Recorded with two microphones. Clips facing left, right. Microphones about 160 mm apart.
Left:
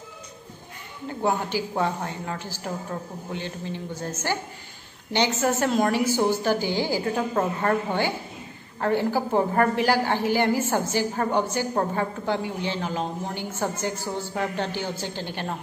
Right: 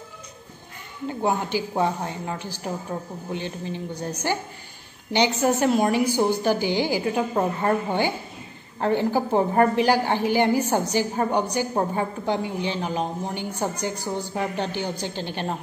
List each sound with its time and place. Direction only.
1.0 s a woman's voice: 15° right (ahead or behind)